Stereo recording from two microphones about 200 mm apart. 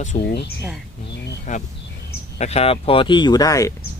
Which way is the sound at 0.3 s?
55° left (ahead or behind).